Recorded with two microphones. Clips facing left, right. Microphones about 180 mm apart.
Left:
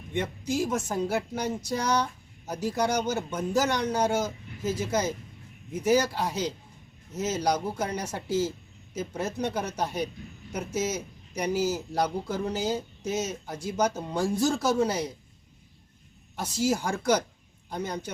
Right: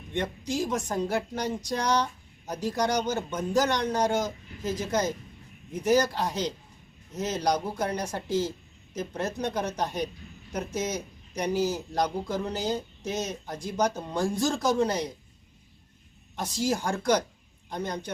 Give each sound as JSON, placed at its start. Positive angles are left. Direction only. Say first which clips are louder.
{"t": 0.1, "sound": "speech", "louder": "left 1 dB", "side_deg": 5}
{"t": 16.3, "sound": "a man's voice", "louder": "left 1 dB", "side_deg": 5}